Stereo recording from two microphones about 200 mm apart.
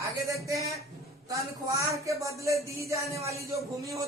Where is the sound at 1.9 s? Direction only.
15° right (ahead or behind).